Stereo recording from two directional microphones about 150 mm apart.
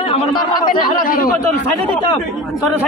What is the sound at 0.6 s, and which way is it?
Speech, 70° left (ahead or behind).